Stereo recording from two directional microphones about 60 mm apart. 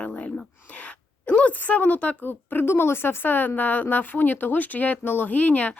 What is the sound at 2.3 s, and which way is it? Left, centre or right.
Speech, left.